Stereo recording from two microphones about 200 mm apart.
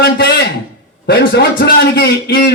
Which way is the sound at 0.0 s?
55° left (ahead or behind).